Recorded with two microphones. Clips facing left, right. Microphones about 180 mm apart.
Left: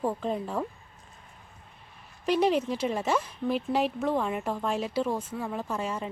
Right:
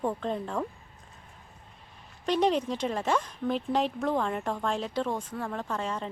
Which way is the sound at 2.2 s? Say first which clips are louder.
Left 1 dB; 5° left (ahead or behind).